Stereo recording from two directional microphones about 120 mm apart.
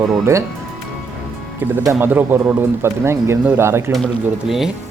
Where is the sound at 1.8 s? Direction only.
15° right (ahead or behind).